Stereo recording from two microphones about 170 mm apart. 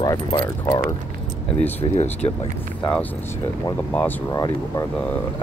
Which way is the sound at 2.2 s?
30° left (ahead or behind).